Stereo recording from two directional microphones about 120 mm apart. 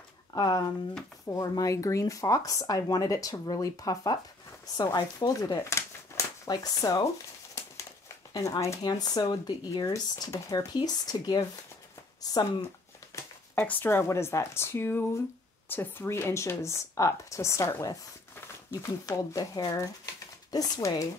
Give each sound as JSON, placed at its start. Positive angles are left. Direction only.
{"t": 0.3, "sound": "speech", "side_deg": 35}
{"t": 8.3, "sound": "speech", "side_deg": 30}
{"t": 13.1, "sound": "speech", "side_deg": 15}